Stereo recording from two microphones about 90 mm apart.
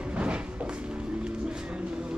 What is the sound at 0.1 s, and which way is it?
Music, 15° right (ahead or behind).